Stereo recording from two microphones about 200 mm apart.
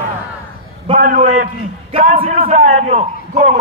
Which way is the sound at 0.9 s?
40° right (ahead or behind).